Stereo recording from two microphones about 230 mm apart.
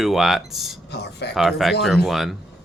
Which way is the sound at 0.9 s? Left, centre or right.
Left.